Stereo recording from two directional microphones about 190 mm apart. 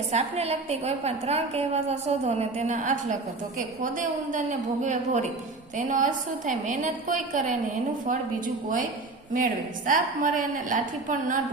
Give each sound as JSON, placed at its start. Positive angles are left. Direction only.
{"t": 0.1, "sound": "a woman's voice", "side_deg": -35}
{"t": 9.3, "sound": "a woman's voice", "side_deg": -45}